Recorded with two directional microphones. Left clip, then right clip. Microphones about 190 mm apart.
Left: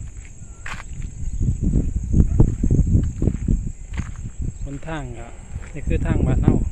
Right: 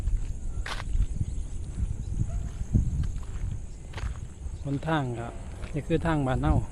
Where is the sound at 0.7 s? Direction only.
Centre (ahead or behind).